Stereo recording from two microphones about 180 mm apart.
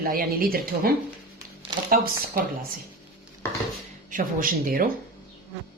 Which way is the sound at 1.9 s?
55° right (ahead or behind).